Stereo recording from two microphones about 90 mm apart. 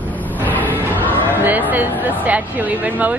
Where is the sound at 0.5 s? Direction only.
20° left (ahead or behind).